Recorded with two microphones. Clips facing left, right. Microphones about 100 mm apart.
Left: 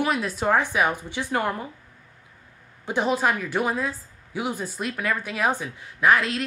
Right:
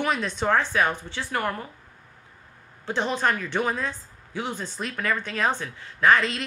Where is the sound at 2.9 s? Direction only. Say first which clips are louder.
Left 2 dB; 10° left (ahead or behind).